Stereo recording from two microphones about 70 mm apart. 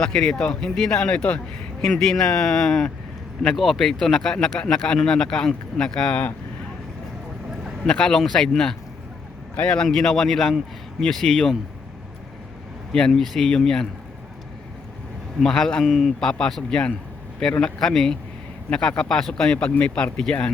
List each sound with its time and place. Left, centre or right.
0.0 s a man's voice: centre
7.9 s a man's voice: centre
12.9 s speech: centre
15.4 s a man's voice: centre